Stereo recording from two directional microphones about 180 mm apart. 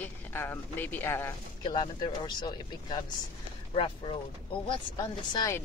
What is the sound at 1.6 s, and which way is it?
Speech, 25° left (ahead or behind).